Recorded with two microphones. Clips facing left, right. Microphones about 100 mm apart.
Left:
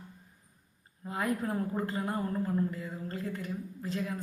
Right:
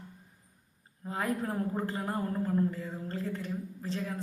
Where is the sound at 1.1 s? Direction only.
35° right (ahead or behind).